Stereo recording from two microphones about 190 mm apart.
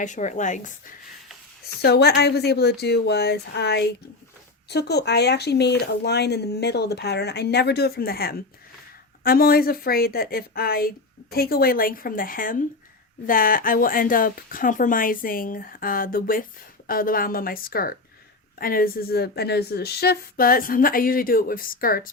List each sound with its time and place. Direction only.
0.0 s a woman's voice: 40° left (ahead or behind)
1.8 s speech: 60° left (ahead or behind)